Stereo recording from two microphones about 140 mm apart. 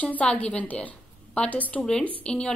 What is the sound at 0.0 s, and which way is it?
Speech, 10° left (ahead or behind).